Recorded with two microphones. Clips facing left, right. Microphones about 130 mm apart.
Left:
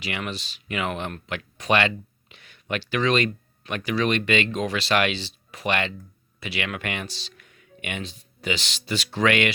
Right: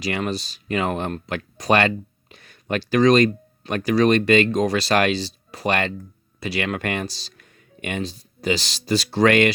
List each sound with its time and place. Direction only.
0.0 s speech: 35° right (ahead or behind)